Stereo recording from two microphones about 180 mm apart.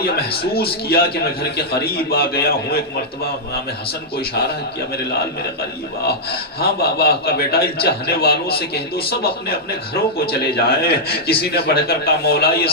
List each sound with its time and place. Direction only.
0.0 s a man's voice: 60° left (ahead or behind)
6.6 s a man's voice: 60° left (ahead or behind)